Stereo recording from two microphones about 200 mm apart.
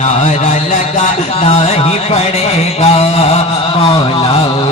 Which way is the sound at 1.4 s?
30° left (ahead or behind).